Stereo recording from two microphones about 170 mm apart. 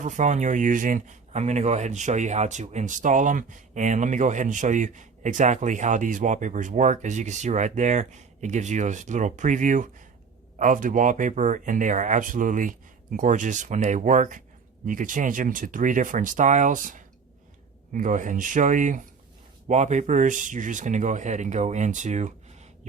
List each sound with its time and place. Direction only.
0.0 s speech: 45° right (ahead or behind)